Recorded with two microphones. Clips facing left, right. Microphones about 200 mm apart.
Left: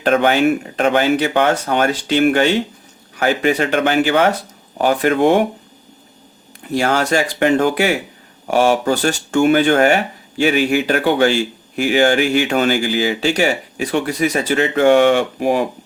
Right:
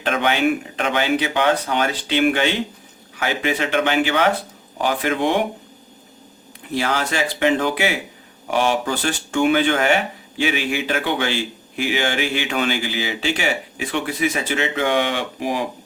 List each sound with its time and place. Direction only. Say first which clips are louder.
0.0 s speech: left 6 dB; 45° left (ahead or behind)
6.7 s speech: left 5 dB; 45° left (ahead or behind)